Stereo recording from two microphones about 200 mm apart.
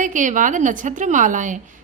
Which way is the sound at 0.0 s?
40° right (ahead or behind).